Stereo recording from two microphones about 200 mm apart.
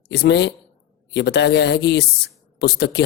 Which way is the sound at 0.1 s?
55° left (ahead or behind).